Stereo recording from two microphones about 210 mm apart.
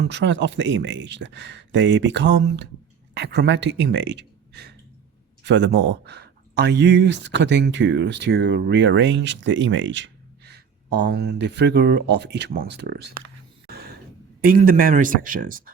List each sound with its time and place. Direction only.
0.0 s speech: 55° right (ahead or behind)
13.7 s a sound: 50° right (ahead or behind)
14.4 s speech: 45° right (ahead or behind)